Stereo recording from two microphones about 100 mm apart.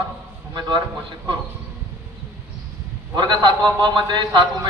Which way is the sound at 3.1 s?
50° right (ahead or behind).